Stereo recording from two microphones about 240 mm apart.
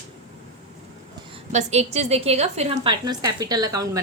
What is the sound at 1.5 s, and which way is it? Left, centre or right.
A woman's voice, right.